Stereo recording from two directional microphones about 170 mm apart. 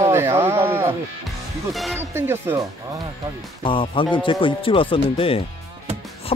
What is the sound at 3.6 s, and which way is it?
Speech, 30° left (ahead or behind).